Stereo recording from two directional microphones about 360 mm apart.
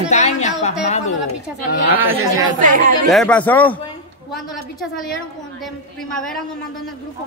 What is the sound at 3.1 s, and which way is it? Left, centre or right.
Speech, centre.